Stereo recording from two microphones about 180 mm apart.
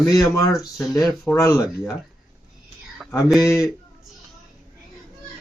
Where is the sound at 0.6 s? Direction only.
Centre (ahead or behind).